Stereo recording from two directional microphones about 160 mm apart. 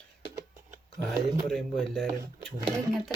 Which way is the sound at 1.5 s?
Centre (ahead or behind).